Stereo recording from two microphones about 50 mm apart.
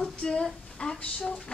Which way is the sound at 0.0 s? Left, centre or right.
Centre.